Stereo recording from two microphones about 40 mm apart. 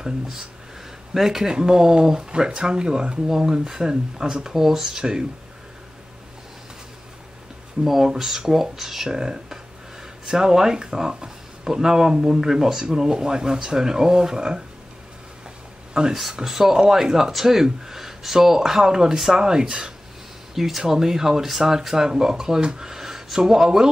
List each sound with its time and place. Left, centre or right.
0.0 s speech: centre
7.8 s speech: centre
15.9 s speech: centre